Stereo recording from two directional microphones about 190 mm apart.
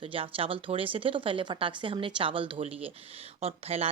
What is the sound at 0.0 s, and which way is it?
Speech, 30° right (ahead or behind).